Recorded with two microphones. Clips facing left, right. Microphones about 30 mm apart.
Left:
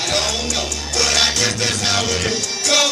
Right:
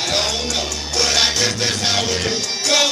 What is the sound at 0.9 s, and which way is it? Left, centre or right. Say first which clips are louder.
Music: even; centre.